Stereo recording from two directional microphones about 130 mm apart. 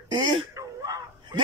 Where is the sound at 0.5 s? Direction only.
25° right (ahead or behind).